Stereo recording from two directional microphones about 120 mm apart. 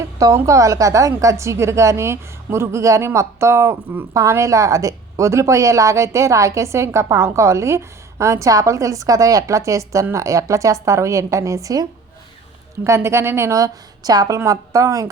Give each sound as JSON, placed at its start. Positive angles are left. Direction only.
{"t": 0.0, "sound": "a woman's voice", "side_deg": -25}